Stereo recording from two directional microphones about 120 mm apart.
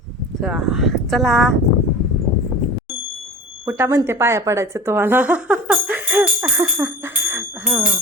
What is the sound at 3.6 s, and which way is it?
A woman's voice, 20° right (ahead or behind).